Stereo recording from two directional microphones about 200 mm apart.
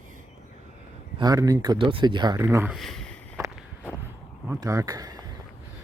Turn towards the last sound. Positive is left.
turn(degrees=-20)  # may be behind; listen again after turning